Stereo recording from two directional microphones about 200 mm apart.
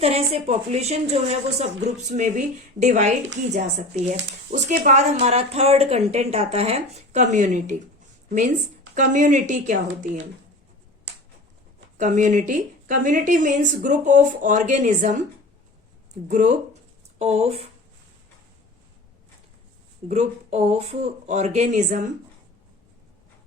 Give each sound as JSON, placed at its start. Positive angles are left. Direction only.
{"t": 0.0, "sound": "speech", "side_deg": -30}
{"t": 9.0, "sound": "speech", "side_deg": -40}
{"t": 11.9, "sound": "speech", "side_deg": -40}
{"t": 16.3, "sound": "speech", "side_deg": -35}
{"t": 20.1, "sound": "speech", "side_deg": -35}